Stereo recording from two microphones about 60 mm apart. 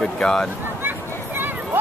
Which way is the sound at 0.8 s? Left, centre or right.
Right.